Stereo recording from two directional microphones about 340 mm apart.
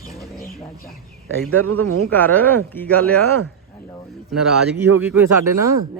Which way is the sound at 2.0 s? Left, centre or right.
Centre.